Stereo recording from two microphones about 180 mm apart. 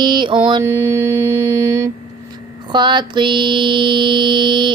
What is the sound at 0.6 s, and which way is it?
Mantra, 15° right (ahead or behind).